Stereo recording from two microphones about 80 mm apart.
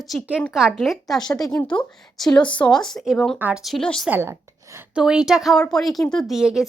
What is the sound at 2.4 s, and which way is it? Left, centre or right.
Speech, centre.